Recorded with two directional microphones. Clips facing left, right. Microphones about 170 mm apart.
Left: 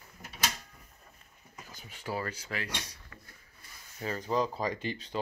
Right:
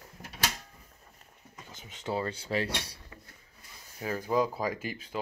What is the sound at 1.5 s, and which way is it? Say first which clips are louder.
Speech: even; 25° right (ahead or behind).